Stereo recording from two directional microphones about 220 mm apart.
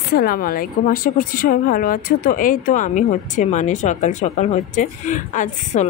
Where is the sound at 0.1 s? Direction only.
40° left (ahead or behind).